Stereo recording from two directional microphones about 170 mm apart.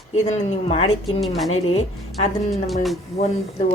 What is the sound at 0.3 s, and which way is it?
Speech, 35° left (ahead or behind).